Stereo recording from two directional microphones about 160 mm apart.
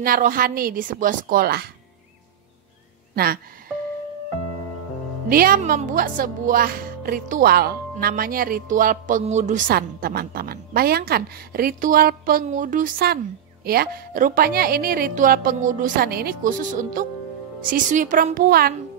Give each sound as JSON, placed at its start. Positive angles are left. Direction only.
{"t": 0.0, "sound": "speech", "side_deg": -60}
{"t": 5.3, "sound": "speech", "side_deg": -65}